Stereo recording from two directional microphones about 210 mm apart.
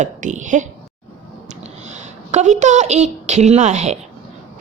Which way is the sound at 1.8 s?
35° right (ahead or behind).